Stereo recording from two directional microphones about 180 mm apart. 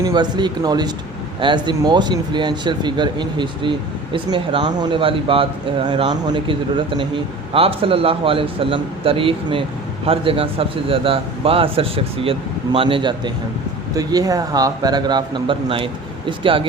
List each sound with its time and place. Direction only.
0.0 s a man's voice: 20° right (ahead or behind)